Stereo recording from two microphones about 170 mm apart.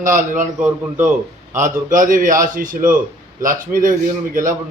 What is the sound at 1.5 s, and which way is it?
A man's voice, 50° right (ahead or behind).